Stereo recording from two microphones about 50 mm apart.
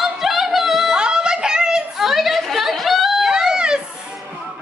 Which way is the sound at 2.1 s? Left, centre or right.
Centre.